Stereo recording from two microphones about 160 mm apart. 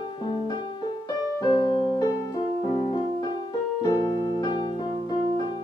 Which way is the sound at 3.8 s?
25° left (ahead or behind).